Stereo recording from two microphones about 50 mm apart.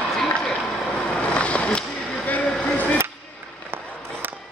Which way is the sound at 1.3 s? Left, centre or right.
Left.